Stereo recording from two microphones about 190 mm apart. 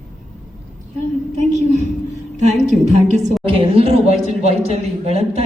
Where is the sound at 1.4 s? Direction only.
35° right (ahead or behind).